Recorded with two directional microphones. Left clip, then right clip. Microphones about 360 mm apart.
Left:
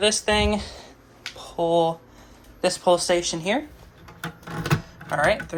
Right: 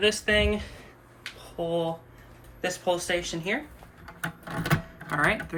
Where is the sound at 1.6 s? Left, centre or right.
Centre.